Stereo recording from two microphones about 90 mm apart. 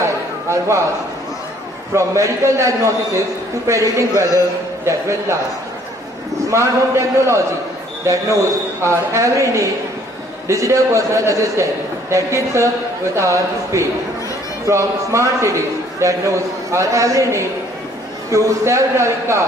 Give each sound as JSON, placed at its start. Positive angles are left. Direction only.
{"t": 0.0, "sound": "a sound", "side_deg": -35}
{"t": 2.0, "sound": "a man's voice", "side_deg": -35}
{"t": 6.5, "sound": "a man's voice", "side_deg": -35}
{"t": 8.8, "sound": "a man's voice", "side_deg": -35}